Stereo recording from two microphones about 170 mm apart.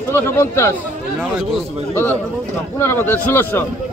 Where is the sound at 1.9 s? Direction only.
15° left (ahead or behind).